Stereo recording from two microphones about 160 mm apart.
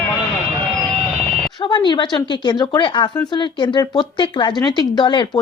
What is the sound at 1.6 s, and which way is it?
A woman's voice, 30° left (ahead or behind).